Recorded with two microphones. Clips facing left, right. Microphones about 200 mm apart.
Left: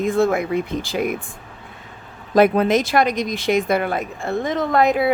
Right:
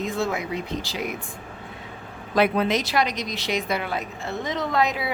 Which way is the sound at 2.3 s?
45° left (ahead or behind).